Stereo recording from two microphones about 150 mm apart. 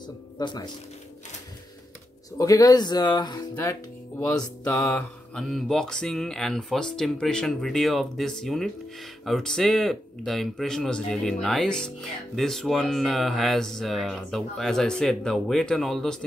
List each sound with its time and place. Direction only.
0.0 s speech: 30° left (ahead or behind)
2.3 s speech: 25° left (ahead or behind)
4.2 s mantra: 10° left (ahead or behind)
5.3 s speech: centre (ahead or behind)